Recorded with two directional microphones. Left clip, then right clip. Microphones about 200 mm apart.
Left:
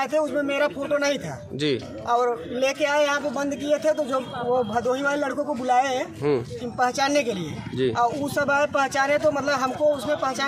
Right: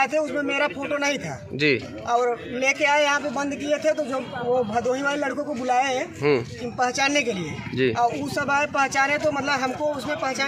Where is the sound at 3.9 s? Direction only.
5° right (ahead or behind).